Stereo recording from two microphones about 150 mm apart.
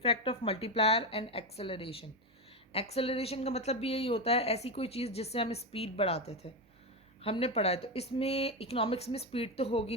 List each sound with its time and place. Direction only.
0.0 s a woman's voice: 40° left (ahead or behind)